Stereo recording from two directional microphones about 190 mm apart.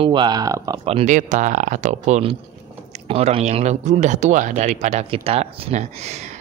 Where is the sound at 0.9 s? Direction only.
35° right (ahead or behind).